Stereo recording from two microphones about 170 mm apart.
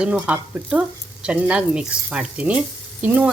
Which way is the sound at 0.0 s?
5° right (ahead or behind).